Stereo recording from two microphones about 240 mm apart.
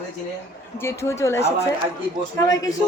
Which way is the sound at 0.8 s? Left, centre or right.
Centre.